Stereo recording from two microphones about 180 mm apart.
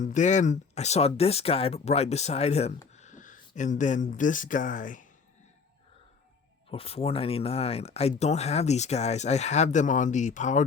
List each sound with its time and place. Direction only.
0.0 s speech: 45° left (ahead or behind)
6.7 s speech: 30° left (ahead or behind)